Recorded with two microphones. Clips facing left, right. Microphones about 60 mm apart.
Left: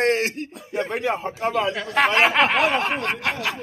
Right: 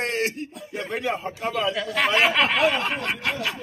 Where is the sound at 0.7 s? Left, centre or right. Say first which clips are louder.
Left 4 dB; left.